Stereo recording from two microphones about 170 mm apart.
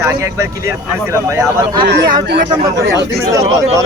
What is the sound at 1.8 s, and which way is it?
Speech, 90° right.